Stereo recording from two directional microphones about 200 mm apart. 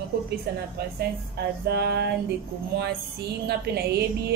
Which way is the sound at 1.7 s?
55° right (ahead or behind).